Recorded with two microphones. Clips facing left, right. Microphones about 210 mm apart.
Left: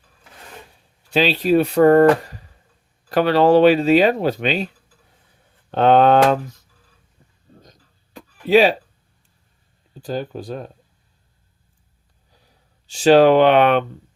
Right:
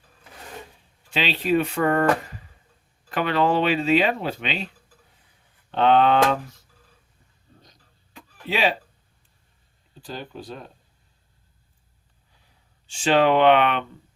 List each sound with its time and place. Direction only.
1.1 s speech: 40° left (ahead or behind)
3.1 s speech: 35° left (ahead or behind)
5.7 s speech: 45° left (ahead or behind)
7.6 s a sound: 45° left (ahead or behind)
10.0 s speech: 45° left (ahead or behind)
12.9 s speech: 40° left (ahead or behind)